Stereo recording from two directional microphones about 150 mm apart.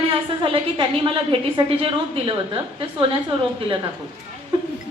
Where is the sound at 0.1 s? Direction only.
35° right (ahead or behind).